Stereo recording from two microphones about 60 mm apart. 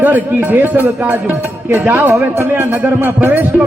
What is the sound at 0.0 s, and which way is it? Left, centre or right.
A man's voice, right.